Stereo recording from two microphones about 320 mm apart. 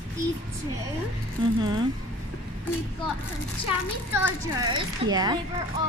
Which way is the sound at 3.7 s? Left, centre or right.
Centre.